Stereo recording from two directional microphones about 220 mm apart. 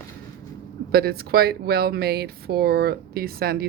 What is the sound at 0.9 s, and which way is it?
Speech, 45° right (ahead or behind).